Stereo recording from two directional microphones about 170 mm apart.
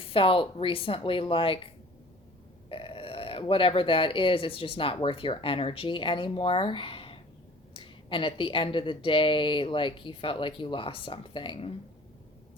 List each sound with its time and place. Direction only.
0.0 s a woman's voice: 35° left (ahead or behind)
2.6 s a woman's voice: 30° left (ahead or behind)